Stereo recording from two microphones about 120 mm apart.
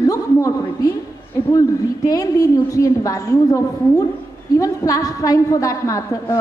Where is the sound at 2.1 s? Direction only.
30° left (ahead or behind).